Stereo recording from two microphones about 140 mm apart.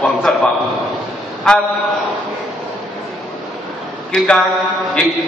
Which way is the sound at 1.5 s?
5° left (ahead or behind).